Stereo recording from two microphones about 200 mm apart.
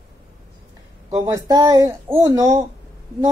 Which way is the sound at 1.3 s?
15° right (ahead or behind).